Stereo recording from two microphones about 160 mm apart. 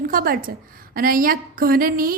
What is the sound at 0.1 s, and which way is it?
A woman's voice, 65° right (ahead or behind).